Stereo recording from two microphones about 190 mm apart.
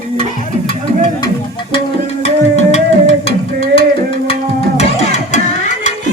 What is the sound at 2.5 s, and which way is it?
Music, 35° left (ahead or behind).